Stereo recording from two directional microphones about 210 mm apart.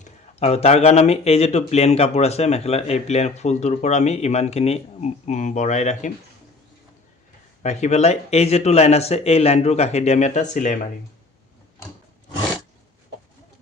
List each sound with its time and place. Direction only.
0.0 s speech: 30° left (ahead or behind)
7.6 s speech: 35° left (ahead or behind)